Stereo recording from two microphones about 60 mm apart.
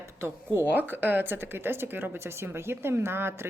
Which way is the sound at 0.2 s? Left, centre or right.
Right.